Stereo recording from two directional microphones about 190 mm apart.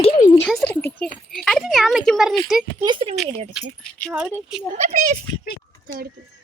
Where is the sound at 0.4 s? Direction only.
5° left (ahead or behind).